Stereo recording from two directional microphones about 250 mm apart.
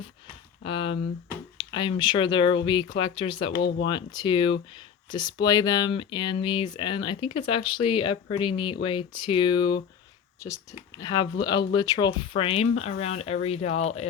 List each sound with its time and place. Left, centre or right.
0.6 s speech: left